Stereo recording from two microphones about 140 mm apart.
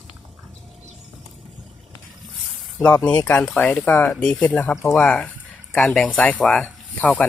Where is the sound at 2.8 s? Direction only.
10° left (ahead or behind).